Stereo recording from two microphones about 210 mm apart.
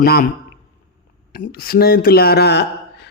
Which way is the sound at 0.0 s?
45° left (ahead or behind).